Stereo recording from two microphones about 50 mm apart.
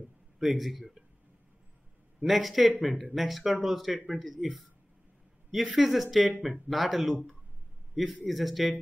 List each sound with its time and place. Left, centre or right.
0.4 s speech: centre
2.1 s speech: centre